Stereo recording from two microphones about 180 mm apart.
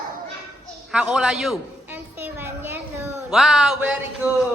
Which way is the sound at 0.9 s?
5° right (ahead or behind).